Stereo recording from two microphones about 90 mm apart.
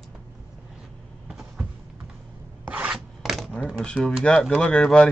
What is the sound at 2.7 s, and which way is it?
Filing, 15° right (ahead or behind).